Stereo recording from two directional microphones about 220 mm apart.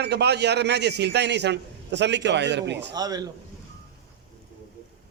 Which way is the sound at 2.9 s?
15° right (ahead or behind).